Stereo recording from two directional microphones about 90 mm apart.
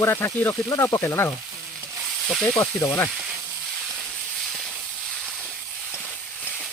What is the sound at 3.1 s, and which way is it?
Speech, 5° right (ahead or behind).